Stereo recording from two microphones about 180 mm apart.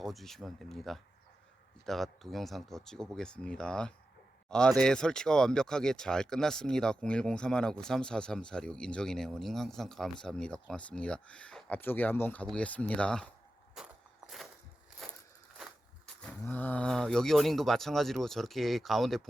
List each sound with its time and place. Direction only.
0.0 s speech: centre (ahead or behind)
13.8 s a sound: centre (ahead or behind)
15.0 s crushing: centre (ahead or behind)
16.4 s speech: 10° left (ahead or behind)